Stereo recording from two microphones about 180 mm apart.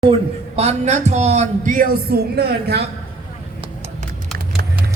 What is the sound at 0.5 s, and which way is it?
Speech, 35° right (ahead or behind).